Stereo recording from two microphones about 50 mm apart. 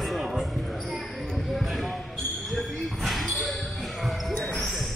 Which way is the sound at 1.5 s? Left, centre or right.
Centre.